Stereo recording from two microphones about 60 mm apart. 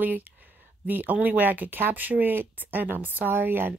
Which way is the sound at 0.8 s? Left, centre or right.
Right.